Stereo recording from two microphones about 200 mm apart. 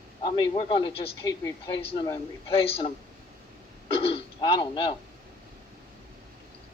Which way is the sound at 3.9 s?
30° left (ahead or behind).